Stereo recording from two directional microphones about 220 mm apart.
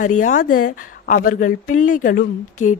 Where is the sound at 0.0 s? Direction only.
35° left (ahead or behind).